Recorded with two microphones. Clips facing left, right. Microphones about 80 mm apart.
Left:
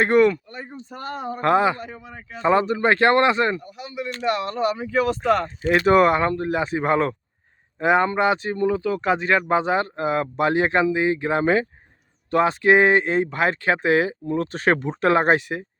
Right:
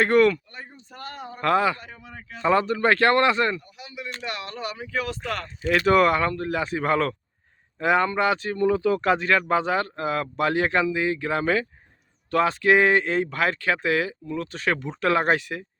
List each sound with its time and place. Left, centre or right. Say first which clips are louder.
0.0 s speech: left 2 dB; centre
2.3 s speech: left 2 dB; centre
3.6 s speech: left 7 dB; left; by 8.7 s centre
8.7 s speech: right 1 dB; centre; by 14.2 s left
14.3 s speech: left 6 dB; left